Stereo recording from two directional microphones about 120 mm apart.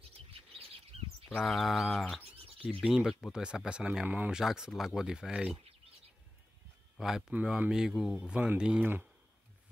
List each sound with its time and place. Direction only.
0.3 s bird: 50° right (ahead or behind)
1.3 s speech: centre (ahead or behind)
7.0 s speech: 5° right (ahead or behind)